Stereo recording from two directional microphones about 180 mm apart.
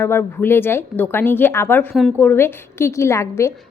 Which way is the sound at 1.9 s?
Centre (ahead or behind).